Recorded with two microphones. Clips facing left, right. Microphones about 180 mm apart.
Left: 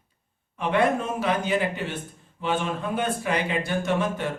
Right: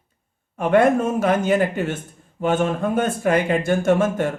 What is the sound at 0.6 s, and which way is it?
Speech, 45° right (ahead or behind).